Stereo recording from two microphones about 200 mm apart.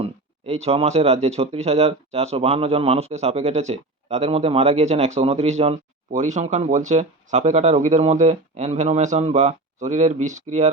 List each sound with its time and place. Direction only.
0.0 s speech: 30° right (ahead or behind)